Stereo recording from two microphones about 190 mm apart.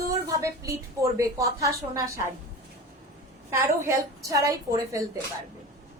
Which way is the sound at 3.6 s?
15° right (ahead or behind).